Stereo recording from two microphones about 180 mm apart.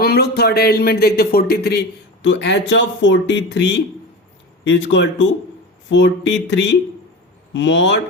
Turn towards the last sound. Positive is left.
turn(degrees=85)